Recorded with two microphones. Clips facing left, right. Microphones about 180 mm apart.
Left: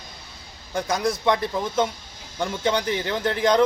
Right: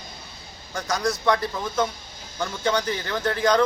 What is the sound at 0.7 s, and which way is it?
A man's voice, 20° left (ahead or behind).